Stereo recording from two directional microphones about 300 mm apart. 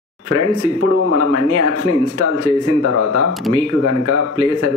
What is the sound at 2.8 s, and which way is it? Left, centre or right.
Speech, left.